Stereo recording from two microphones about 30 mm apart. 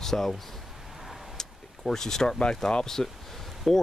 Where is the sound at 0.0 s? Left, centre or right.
Centre.